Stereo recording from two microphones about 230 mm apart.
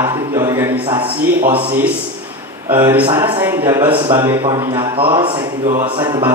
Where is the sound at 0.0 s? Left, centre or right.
Centre.